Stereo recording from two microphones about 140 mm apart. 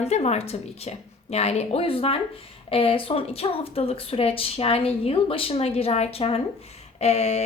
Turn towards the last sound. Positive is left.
turn(degrees=50)  # may be behind; listen again after turning